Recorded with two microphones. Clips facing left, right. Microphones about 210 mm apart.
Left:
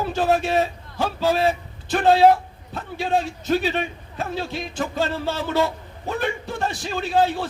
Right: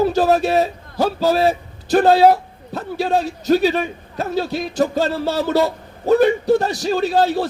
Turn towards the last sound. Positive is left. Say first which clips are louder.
# right 4 dB
turn(degrees=-35)  # may be behind; listen again after turning